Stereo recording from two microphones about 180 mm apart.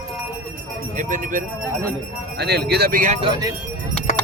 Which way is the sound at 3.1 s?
30° right (ahead or behind).